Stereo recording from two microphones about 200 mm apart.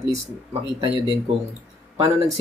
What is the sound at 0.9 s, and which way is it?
Speech, 25° left (ahead or behind).